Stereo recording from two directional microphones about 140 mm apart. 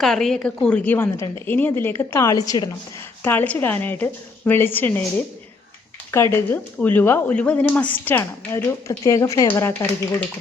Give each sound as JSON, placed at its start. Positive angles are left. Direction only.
{"t": 0.0, "sound": "speech", "side_deg": 0}
{"t": 3.2, "sound": "speech", "side_deg": 15}